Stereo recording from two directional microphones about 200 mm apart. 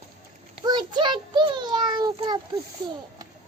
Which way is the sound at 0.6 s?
20° right (ahead or behind).